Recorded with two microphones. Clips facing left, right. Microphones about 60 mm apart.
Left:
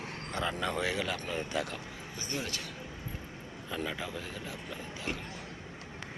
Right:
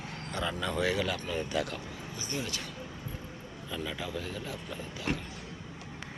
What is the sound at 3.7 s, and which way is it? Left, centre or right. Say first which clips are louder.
Speech: even; left.